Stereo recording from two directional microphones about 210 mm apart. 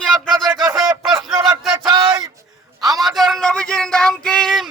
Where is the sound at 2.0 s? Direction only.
15° right (ahead or behind).